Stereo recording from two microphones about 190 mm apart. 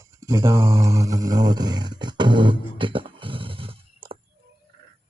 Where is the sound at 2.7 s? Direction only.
25° right (ahead or behind).